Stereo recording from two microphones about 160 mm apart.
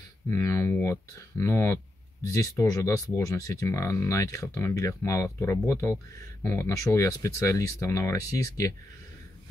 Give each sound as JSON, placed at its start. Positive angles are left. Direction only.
{"t": 0.3, "sound": "speech", "side_deg": 20}